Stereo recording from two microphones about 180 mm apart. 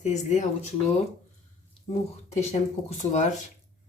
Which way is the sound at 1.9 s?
35° left (ahead or behind).